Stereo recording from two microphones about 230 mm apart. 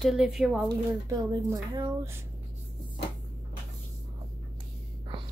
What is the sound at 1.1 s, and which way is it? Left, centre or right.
Speech, centre.